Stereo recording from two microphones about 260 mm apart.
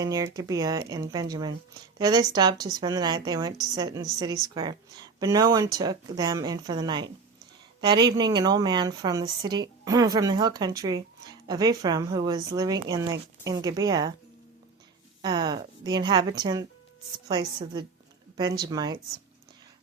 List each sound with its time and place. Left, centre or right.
0.0 s a woman's voice: centre
15.2 s a woman's voice: centre